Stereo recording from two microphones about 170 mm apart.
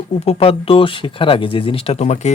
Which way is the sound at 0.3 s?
35° left (ahead or behind).